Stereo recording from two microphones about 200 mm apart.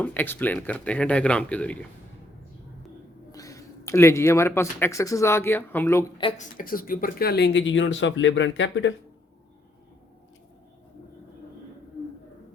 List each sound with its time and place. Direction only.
0.0 s speech: 10° left (ahead or behind)
3.3 s speech: 15° left (ahead or behind)
6.1 s speech: 25° left (ahead or behind)
6.6 s speech: 45° left (ahead or behind); by 9.0 s 65° left (ahead or behind)